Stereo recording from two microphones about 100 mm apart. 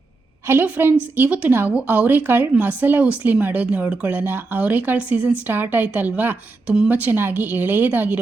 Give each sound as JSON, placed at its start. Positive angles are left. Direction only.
{"t": 0.4, "sound": "a woman's voice", "side_deg": -20}